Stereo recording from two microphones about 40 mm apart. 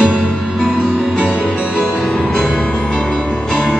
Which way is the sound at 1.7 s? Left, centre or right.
Centre.